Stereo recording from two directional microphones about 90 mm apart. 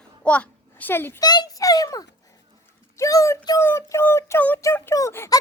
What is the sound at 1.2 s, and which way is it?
Speech, 55° left (ahead or behind).